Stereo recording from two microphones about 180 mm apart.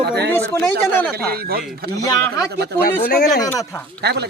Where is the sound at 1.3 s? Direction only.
60° right (ahead or behind).